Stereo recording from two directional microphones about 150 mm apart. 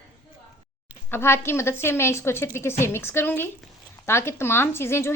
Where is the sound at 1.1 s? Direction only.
15° left (ahead or behind).